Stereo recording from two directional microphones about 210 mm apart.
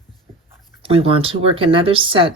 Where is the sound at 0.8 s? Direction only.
25° right (ahead or behind).